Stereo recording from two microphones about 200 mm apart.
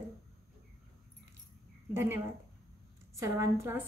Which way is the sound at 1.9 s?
10° right (ahead or behind).